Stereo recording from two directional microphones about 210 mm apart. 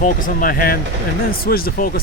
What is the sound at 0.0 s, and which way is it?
Speech, 40° left (ahead or behind).